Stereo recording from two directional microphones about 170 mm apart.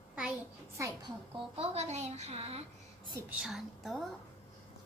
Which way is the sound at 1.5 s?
35° right (ahead or behind).